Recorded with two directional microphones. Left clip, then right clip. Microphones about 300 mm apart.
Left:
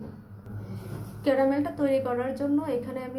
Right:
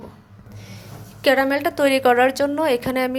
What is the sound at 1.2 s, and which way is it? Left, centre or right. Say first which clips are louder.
A woman's voice: right 7 dB; right.